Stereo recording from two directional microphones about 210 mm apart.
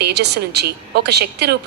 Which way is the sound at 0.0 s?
50° right (ahead or behind).